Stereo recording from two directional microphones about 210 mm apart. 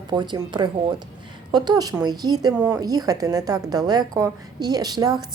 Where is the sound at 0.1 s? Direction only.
20° right (ahead or behind).